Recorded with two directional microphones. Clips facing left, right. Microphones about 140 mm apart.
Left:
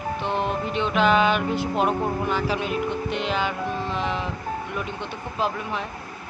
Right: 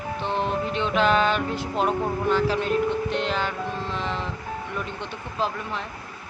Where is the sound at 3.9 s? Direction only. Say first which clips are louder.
Left 2 dB; 10° left (ahead or behind).